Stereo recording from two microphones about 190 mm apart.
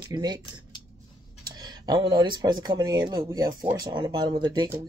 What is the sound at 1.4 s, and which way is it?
Speech, 20° right (ahead or behind).